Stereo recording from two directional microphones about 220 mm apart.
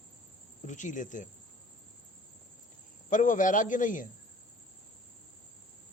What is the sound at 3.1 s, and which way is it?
Speech, 35° left (ahead or behind).